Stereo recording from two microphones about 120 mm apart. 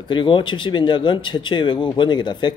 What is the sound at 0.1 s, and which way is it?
Speech, 45° left (ahead or behind).